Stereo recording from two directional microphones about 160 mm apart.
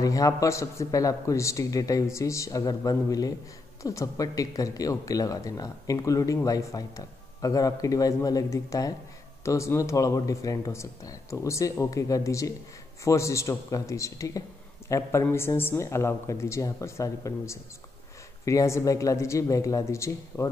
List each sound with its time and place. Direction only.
0.0 s a woman's voice: 20° left (ahead or behind)